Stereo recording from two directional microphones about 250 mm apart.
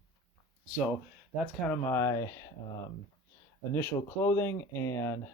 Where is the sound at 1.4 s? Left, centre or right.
Centre.